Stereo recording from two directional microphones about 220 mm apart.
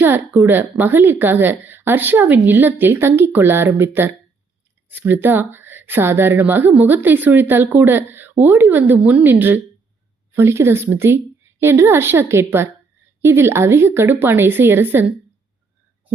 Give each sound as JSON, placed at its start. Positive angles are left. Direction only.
{"t": 0.0, "sound": "a woman's voice", "side_deg": -10}